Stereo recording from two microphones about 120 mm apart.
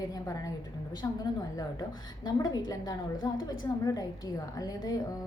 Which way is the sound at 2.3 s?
35° left (ahead or behind).